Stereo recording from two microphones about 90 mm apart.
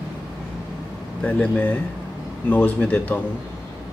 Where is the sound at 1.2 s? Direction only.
15° left (ahead or behind).